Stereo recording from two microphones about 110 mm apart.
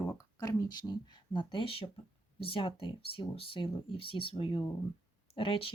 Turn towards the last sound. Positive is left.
turn(degrees=55)  # may be behind; listen again after turning